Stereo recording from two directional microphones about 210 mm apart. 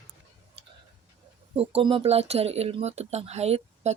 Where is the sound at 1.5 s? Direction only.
25° right (ahead or behind).